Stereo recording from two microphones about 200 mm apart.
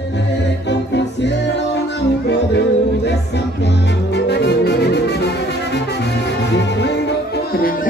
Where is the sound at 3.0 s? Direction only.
60° left (ahead or behind).